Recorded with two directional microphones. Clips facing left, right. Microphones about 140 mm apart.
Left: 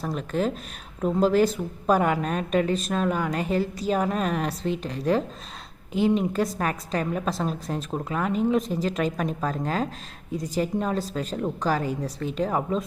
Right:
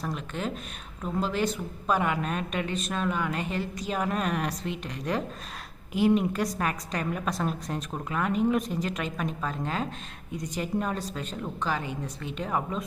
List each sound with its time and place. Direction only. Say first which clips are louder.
0.0 s a woman's voice: left 6 dB; 35° left (ahead or behind)
6.3 s a woman's voice: left 3 dB; 35° left (ahead or behind)